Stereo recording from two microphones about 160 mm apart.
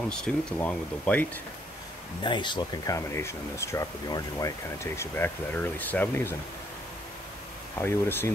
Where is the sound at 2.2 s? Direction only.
30° left (ahead or behind); by 6.3 s 10° left (ahead or behind).